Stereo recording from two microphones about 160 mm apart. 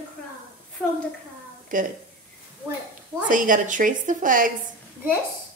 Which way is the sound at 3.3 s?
55° right (ahead or behind).